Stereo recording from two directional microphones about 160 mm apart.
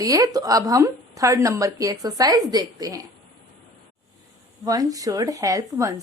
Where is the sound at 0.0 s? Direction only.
20° right (ahead or behind).